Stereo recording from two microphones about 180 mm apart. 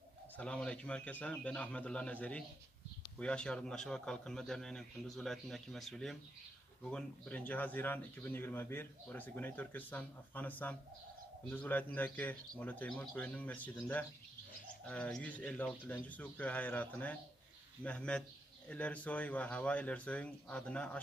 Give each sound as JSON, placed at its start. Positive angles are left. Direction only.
{"t": 0.4, "sound": "a man's voice", "side_deg": 5}